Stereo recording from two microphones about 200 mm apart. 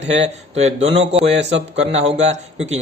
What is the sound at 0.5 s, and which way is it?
Speech, 30° right (ahead or behind).